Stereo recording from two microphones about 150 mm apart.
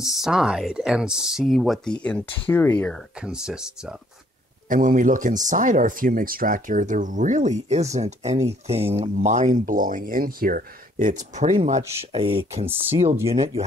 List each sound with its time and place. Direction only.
0.2 s speech: 5° right (ahead or behind)
3.2 s speech: 5° right (ahead or behind)
4.6 s speech: 60° right (ahead or behind)
12.1 s speech: 35° right (ahead or behind)